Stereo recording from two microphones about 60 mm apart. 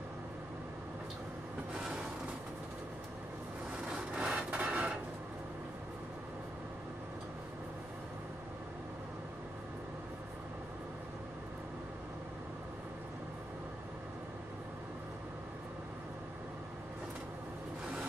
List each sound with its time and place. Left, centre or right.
3.9 s rub: centre